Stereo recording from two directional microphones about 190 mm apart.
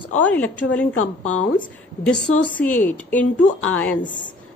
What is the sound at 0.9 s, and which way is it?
Speech, 90° left.